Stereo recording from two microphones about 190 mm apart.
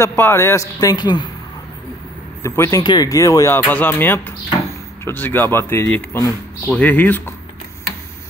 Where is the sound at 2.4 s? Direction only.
15° left (ahead or behind).